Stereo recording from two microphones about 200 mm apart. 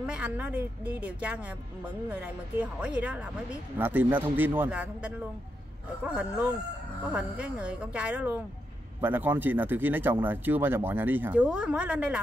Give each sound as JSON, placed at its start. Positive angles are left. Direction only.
{"t": 0.0, "sound": "speech", "side_deg": -5}